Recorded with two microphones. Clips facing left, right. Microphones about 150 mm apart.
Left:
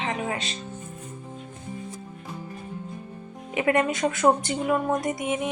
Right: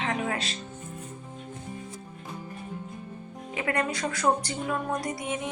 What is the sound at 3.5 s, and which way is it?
Speech, 20° left (ahead or behind).